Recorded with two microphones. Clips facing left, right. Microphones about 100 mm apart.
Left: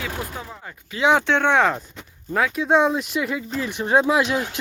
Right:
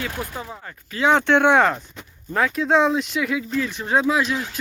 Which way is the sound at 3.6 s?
15° left (ahead or behind).